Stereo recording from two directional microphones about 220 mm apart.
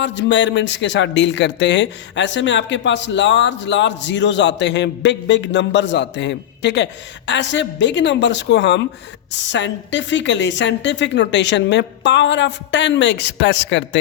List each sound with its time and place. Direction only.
0.0 s a woman's voice: 55° left (ahead or behind)